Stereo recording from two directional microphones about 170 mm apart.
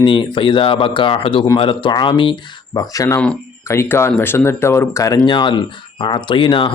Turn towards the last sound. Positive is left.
turn(degrees=30)  # may be behind; listen again after turning